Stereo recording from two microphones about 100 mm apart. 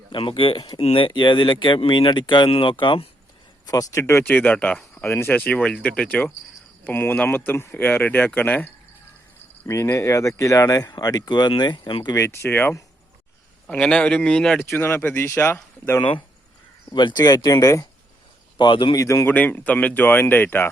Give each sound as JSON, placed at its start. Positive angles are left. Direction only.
{"t": 0.1, "sound": "speech", "side_deg": 60}
{"t": 3.7, "sound": "speech", "side_deg": 30}
{"t": 4.3, "sound": "speech", "side_deg": 15}
{"t": 9.6, "sound": "speech", "side_deg": 30}
{"t": 12.1, "sound": "speech", "side_deg": 25}
{"t": 13.7, "sound": "speech", "side_deg": 10}
{"t": 14.6, "sound": "speech", "side_deg": 25}
{"t": 16.0, "sound": "speech", "side_deg": 60}
{"t": 18.5, "sound": "speech", "side_deg": 50}
{"t": 18.9, "sound": "speech", "side_deg": 30}
{"t": 19.3, "sound": "speech", "side_deg": 15}